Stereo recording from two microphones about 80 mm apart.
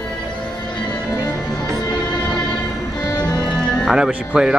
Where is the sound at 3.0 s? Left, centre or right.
Left.